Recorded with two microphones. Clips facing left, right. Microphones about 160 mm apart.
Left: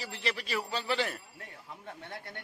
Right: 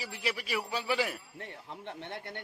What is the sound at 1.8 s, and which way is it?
Speech, 25° right (ahead or behind).